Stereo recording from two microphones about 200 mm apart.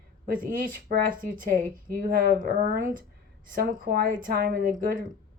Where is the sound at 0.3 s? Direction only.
45° right (ahead or behind).